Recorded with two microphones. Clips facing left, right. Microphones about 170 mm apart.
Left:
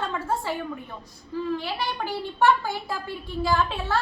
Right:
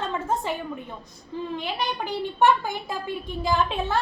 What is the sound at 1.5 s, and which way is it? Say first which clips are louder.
A child's voice: right 1 dB; 20° right (ahead or behind).